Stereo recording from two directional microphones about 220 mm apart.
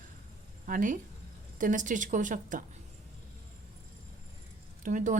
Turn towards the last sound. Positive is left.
turn(degrees=-35)  # may be behind; listen again after turning